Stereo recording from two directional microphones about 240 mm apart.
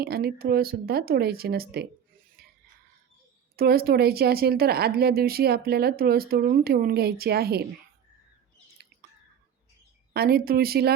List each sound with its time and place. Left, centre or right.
0.0 s speech: right
3.5 s speech: right
10.1 s speech: right